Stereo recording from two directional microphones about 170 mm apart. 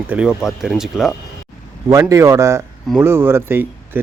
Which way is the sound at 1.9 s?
20° right (ahead or behind).